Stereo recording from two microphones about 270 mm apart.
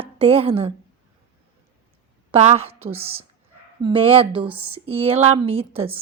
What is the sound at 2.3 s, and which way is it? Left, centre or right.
Speech, right.